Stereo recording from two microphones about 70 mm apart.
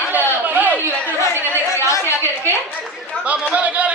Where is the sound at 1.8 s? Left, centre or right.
Left.